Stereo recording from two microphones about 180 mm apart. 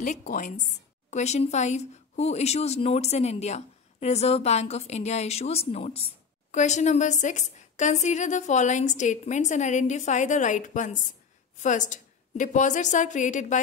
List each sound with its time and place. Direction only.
0.0 s a woman's voice: 45° left (ahead or behind)